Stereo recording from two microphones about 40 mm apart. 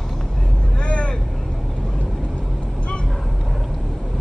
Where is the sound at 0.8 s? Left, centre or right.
Left.